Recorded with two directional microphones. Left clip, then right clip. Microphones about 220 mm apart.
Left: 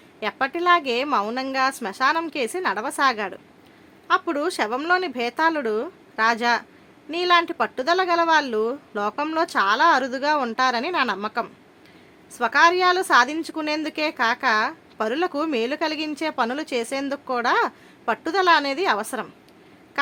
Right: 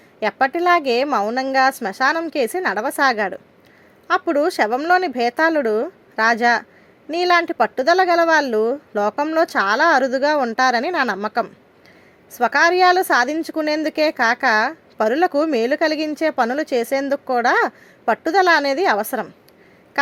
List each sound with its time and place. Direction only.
0.2 s a woman's voice: 15° right (ahead or behind)